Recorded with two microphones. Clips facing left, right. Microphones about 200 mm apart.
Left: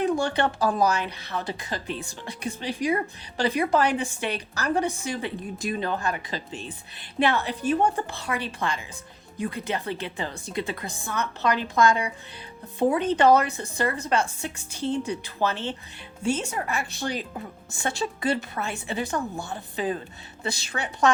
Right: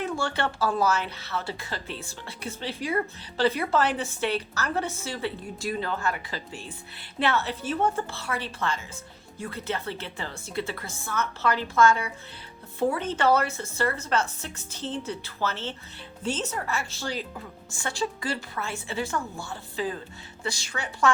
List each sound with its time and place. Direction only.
0.0 s a woman's voice: 15° left (ahead or behind)